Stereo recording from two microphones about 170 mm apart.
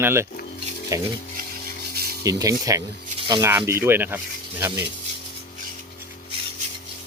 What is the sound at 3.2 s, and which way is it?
Rub, 25° right (ahead or behind).